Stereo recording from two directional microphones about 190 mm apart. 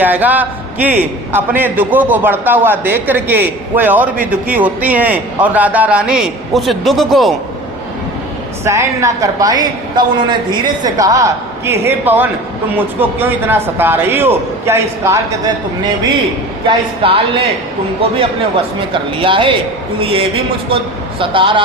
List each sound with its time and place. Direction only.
0.0 s a man's voice: 10° right (ahead or behind)
8.6 s a man's voice: 15° right (ahead or behind)
16.6 s speech: 25° right (ahead or behind)
19.2 s speech: 25° right (ahead or behind)